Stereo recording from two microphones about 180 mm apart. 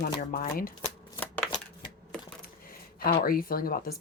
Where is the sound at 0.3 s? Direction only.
55° left (ahead or behind).